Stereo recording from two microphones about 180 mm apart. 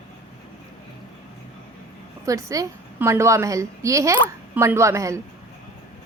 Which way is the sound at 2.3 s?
15° right (ahead or behind).